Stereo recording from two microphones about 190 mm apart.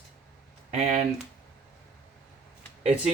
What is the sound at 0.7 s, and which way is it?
Speech, 35° right (ahead or behind).